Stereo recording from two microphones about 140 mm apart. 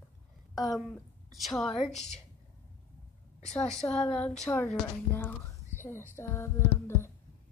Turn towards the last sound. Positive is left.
turn(degrees=20)  # may be behind; listen again after turning